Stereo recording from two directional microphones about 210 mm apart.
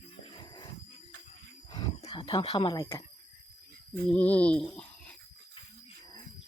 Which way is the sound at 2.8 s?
15° left (ahead or behind).